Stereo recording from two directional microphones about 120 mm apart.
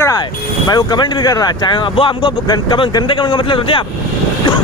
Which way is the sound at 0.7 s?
35° left (ahead or behind).